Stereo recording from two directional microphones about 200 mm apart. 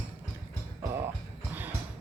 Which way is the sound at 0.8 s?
15° right (ahead or behind).